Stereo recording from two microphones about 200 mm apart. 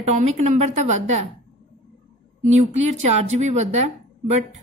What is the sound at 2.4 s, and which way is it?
Speech, 35° right (ahead or behind).